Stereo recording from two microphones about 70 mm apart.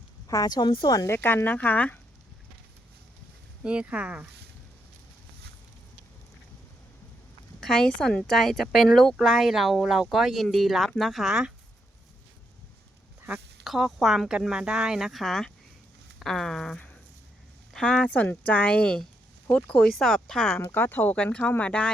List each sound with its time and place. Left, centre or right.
0.3 s speech: left
1.0 s speech: left
3.6 s speech: centre
7.6 s speech: centre
8.3 s speech: centre
13.7 s speech: centre
19.8 s speech: centre
20.7 s speech: left
21.6 s speech: centre